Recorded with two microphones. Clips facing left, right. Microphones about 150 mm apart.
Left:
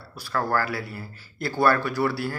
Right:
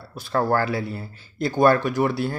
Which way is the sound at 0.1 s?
20° right (ahead or behind).